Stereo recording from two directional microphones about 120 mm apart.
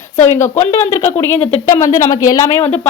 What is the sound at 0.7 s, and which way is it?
Speech, 20° left (ahead or behind).